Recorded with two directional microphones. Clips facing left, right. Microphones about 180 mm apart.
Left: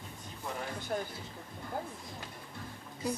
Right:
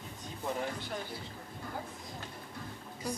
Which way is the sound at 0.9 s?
45° left (ahead or behind).